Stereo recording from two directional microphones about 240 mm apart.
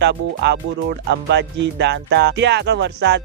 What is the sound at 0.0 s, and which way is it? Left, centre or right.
Speech, right.